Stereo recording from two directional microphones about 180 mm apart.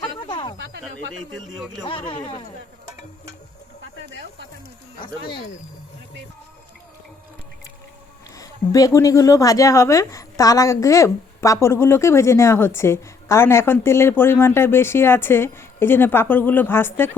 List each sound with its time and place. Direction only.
0.3 s a sound: 25° left (ahead or behind)
2.0 s speech: 25° left (ahead or behind)
4.9 s speech: 25° left (ahead or behind)
8.4 s speech: 20° left (ahead or behind)